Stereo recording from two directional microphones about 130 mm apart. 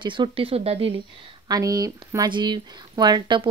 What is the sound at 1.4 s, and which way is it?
Speech, 30° right (ahead or behind).